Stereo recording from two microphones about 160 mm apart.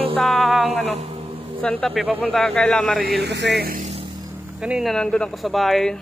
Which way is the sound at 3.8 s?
40° right (ahead or behind).